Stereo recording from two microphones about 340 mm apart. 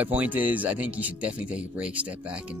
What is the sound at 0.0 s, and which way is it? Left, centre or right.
Speech, centre.